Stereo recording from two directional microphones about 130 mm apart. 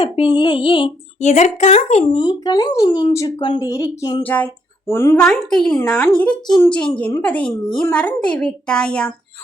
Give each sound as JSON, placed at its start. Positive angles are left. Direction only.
{"t": 0.0, "sound": "speech", "side_deg": 40}
{"t": 1.2, "sound": "speech", "side_deg": 65}
{"t": 2.1, "sound": "speech", "side_deg": 35}
{"t": 3.2, "sound": "speech", "side_deg": 25}
{"t": 4.2, "sound": "speech", "side_deg": 10}
{"t": 5.2, "sound": "a woman's voice", "side_deg": 5}
{"t": 5.7, "sound": "speech", "side_deg": 15}